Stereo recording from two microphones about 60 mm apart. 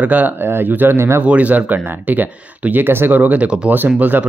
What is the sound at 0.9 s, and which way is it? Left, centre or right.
Speech, right.